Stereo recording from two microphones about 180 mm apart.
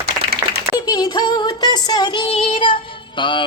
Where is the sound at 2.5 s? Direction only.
25° left (ahead or behind).